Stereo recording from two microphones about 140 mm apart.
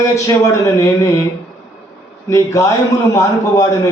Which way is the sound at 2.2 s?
20° left (ahead or behind).